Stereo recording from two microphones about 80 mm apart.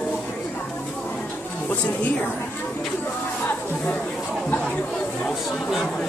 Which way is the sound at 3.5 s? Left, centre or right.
Left.